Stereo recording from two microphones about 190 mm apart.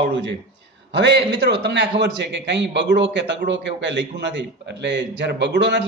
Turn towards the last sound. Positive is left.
turn(degrees=-65)  # may be behind; listen again after turning